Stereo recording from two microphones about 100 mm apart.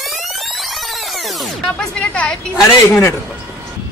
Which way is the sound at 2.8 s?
25° left (ahead or behind).